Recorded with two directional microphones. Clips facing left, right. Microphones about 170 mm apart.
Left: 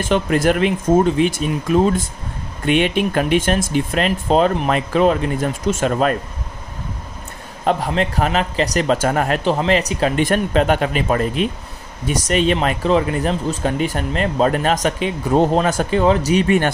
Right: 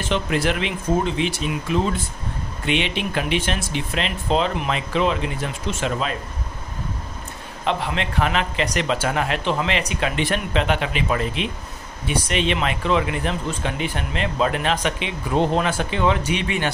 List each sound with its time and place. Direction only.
0.0 s speech: 50° left (ahead or behind)
7.6 s speech: 40° left (ahead or behind)